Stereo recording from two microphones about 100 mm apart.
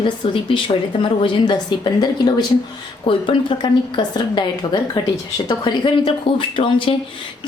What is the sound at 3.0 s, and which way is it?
A woman's voice, 60° left (ahead or behind).